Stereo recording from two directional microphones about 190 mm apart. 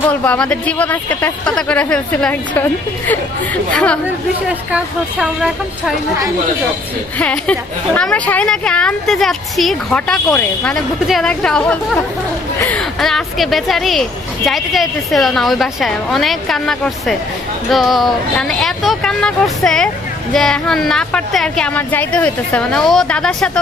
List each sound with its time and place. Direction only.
0.1 s speech: 5° left (ahead or behind)
5.2 s a woman's voice: centre (ahead or behind)
7.2 s a woman's voice: 5° left (ahead or behind)